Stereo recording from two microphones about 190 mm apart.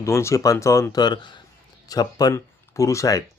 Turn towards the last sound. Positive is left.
turn(degrees=15)  # may be behind; listen again after turning